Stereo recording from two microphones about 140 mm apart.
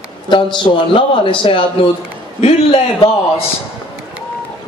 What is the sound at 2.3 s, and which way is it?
Speech, 50° left (ahead or behind).